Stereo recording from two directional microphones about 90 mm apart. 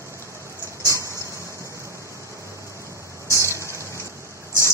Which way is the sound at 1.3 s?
35° right (ahead or behind).